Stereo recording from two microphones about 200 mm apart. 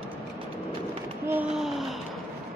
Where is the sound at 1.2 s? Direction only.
10° right (ahead or behind).